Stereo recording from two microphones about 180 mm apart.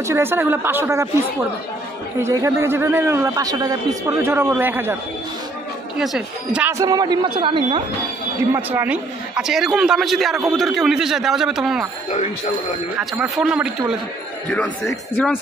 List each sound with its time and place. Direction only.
0.0 s a man's voice: 15° right (ahead or behind)
2.2 s a man's voice: 15° right (ahead or behind)
5.9 s a woman's voice: 5° right (ahead or behind); by 7.8 s 30° right (ahead or behind)
8.5 s a man's voice: 10° right (ahead or behind)
13.2 s a man's voice: 5° right (ahead or behind)